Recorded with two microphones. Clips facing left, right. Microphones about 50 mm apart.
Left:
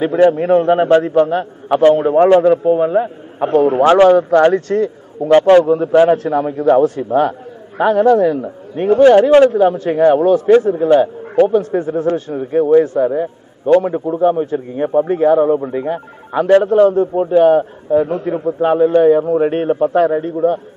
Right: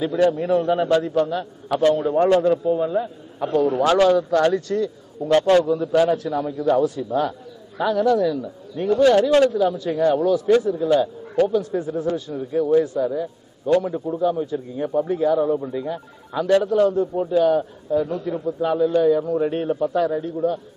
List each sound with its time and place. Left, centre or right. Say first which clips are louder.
0.0 s a man's voice: left 7 dB; left
5.3 s a man's voice: left 8 dB; left